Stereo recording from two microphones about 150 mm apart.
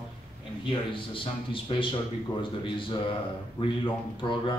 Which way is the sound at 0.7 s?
35° left (ahead or behind).